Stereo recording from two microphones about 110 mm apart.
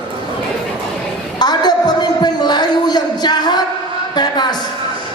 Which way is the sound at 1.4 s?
40° left (ahead or behind).